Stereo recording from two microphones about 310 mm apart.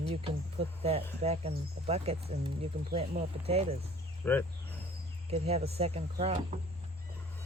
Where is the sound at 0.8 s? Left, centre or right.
Centre.